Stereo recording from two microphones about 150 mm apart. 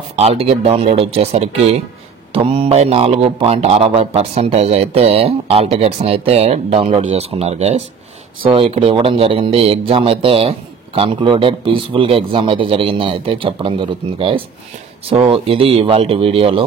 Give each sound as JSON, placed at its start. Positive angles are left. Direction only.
{"t": 0.1, "sound": "a man's voice", "side_deg": -45}